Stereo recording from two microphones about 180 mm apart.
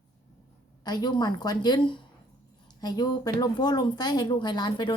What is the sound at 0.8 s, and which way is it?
Speech, 25° left (ahead or behind).